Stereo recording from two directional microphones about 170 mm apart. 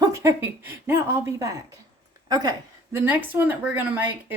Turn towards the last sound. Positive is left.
turn(degrees=-10)  # may be behind; listen again after turning